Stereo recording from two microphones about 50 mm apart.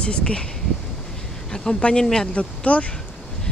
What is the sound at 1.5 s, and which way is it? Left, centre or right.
Speech, centre.